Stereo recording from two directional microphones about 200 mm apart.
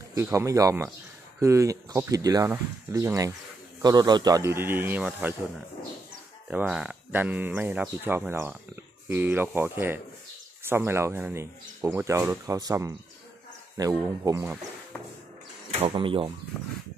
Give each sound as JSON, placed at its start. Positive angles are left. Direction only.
{"t": 0.1, "sound": "speech", "side_deg": -15}
{"t": 6.5, "sound": "speech", "side_deg": -5}
{"t": 15.9, "sound": "speech", "side_deg": -25}